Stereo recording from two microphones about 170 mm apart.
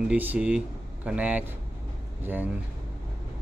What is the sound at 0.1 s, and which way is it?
Speech, 10° right (ahead or behind).